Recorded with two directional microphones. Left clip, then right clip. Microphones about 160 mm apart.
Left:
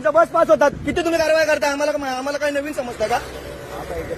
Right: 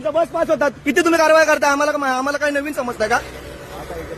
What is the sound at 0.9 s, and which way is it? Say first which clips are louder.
A man's voice: right 7 dB; 75° right (ahead or behind).